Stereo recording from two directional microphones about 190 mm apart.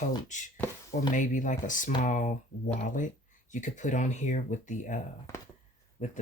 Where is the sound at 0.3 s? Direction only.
40° left (ahead or behind).